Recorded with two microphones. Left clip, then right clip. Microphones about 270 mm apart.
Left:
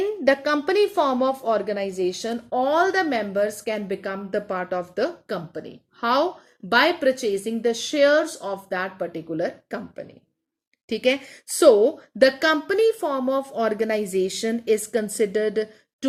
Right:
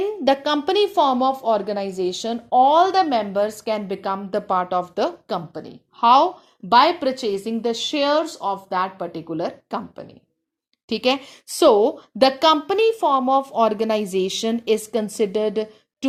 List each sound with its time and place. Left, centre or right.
0.3 s a woman's voice: centre
10.8 s a woman's voice: centre